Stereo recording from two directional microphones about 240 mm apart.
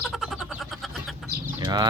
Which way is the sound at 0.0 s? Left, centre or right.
Centre.